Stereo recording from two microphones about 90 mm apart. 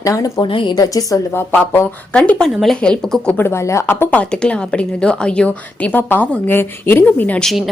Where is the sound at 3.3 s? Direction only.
30° left (ahead or behind).